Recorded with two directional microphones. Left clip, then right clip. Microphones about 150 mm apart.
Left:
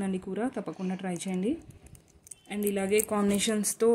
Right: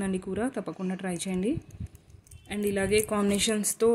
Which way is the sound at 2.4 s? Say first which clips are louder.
Right 2 dB; centre (ahead or behind).